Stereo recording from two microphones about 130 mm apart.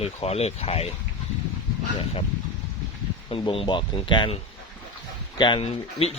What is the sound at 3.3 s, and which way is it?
Speech, 45° left (ahead or behind).